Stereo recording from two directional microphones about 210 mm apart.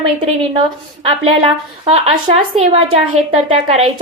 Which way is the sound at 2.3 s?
25° right (ahead or behind).